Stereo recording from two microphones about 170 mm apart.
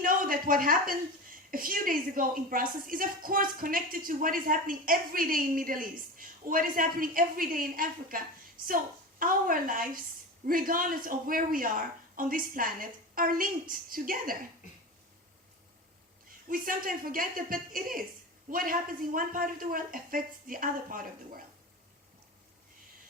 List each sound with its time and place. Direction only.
0.0 s a woman's voice: 55° right (ahead or behind)
16.5 s a woman's voice: 55° right (ahead or behind)